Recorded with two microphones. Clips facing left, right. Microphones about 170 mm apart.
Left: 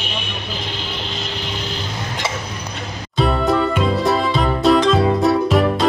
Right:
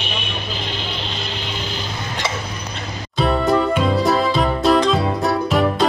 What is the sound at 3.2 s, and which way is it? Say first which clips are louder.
Music: even; centre (ahead or behind).